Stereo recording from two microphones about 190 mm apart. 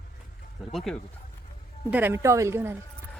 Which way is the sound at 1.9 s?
10° right (ahead or behind).